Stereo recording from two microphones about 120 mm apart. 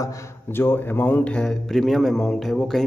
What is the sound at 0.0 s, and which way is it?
A man's voice, 20° left (ahead or behind).